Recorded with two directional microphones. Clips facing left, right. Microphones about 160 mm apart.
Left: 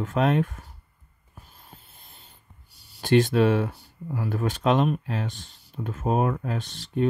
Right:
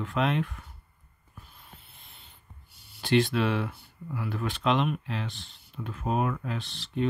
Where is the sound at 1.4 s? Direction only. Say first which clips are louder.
Left 2 dB; 40° left (ahead or behind).